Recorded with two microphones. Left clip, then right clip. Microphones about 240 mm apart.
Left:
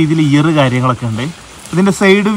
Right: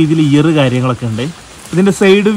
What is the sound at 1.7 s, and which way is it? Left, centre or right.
Speech, centre.